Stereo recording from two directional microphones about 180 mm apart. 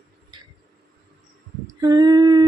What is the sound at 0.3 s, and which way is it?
Tick-tock, 25° right (ahead or behind).